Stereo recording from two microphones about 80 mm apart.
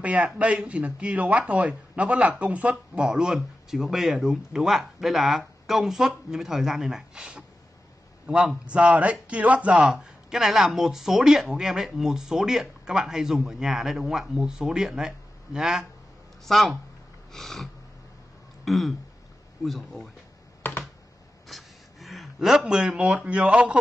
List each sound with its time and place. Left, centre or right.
0.0 s a man's voice: centre
18.7 s speech: centre
20.6 s computer keyboard: left
21.5 s speech: centre